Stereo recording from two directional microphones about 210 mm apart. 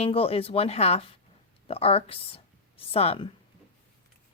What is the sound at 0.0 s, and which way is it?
Speech, 30° left (ahead or behind).